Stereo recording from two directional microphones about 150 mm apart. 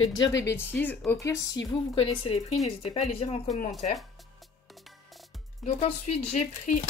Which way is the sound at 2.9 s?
50° left (ahead or behind).